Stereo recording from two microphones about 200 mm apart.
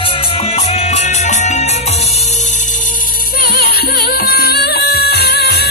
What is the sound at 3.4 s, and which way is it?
Music, 50° left (ahead or behind).